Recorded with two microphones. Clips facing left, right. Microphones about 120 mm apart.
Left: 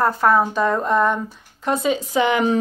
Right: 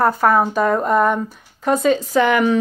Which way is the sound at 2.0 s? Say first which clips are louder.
Right 3 dB; 20° left (ahead or behind).